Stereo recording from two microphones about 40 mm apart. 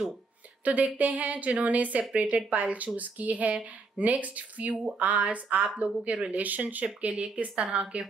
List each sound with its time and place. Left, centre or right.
0.7 s a woman's voice: right
6.3 s a woman's voice: right